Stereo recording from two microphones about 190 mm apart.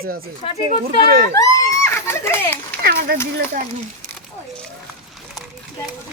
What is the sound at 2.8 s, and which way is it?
Speech, 55° right (ahead or behind).